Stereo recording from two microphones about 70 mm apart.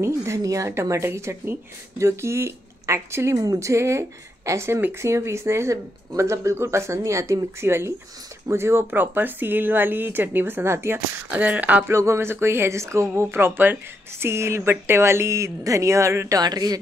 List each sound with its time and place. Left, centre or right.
0.0 s speech: right
11.2 s speech: right
11.9 s speech: right
16.3 s speech: right